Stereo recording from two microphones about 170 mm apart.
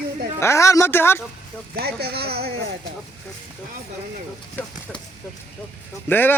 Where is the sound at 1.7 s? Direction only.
70° right (ahead or behind).